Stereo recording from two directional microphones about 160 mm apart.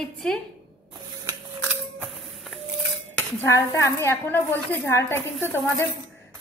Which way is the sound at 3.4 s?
20° left (ahead or behind).